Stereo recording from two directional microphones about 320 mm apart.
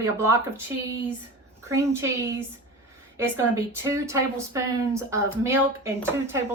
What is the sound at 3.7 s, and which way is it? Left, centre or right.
Speech, centre.